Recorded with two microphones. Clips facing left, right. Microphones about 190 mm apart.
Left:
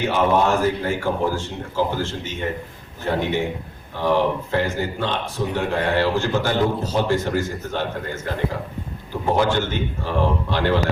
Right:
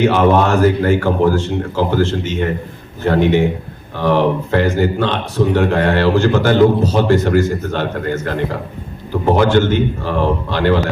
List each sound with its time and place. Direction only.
0.0 s a man's voice: 80° right